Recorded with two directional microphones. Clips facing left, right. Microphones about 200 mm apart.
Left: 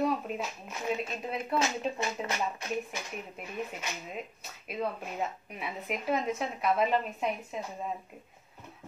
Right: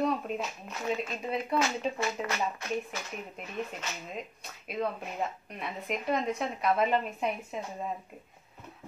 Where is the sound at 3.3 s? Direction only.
5° left (ahead or behind).